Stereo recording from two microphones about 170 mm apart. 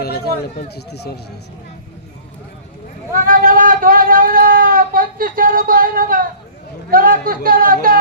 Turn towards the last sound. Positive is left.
turn(degrees=-55)  # may be behind; listen again after turning